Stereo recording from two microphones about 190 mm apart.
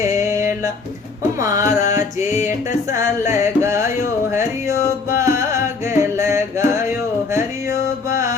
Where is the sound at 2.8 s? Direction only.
15° right (ahead or behind).